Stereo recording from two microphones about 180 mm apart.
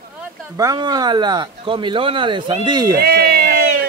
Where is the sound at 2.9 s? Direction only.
60° right (ahead or behind).